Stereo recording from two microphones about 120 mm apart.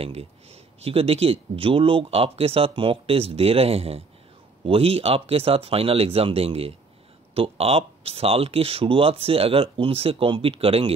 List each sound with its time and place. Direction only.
0.0 s speech: 60° right (ahead or behind)